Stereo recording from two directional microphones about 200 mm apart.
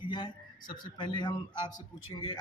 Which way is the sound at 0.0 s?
25° left (ahead or behind).